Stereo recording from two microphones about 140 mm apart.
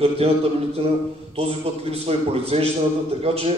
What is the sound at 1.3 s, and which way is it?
A man's voice, 45° right (ahead or behind).